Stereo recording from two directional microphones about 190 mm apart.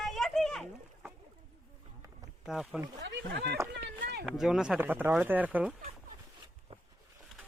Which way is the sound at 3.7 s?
65° right (ahead or behind).